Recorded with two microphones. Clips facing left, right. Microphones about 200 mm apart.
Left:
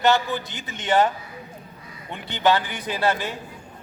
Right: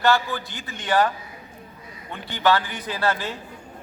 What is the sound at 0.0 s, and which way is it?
A man's voice, 20° left (ahead or behind).